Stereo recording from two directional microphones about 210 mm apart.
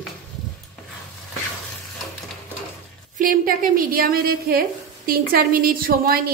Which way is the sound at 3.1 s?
40° right (ahead or behind).